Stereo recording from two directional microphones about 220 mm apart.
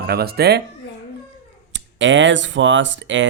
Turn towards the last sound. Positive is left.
turn(degrees=-55)  # may be behind; listen again after turning